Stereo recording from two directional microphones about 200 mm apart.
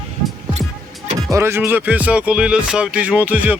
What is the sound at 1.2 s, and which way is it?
Music, 15° right (ahead or behind).